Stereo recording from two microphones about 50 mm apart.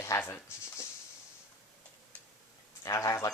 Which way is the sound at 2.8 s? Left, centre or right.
Left.